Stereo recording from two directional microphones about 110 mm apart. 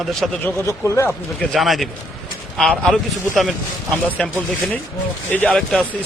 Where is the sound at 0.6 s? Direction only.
25° left (ahead or behind).